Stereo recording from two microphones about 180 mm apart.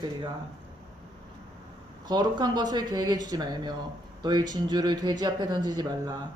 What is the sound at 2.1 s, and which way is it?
Speech, 25° right (ahead or behind).